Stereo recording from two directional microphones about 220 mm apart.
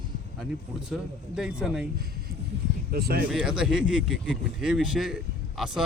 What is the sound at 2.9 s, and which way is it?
Speech, 45° right (ahead or behind).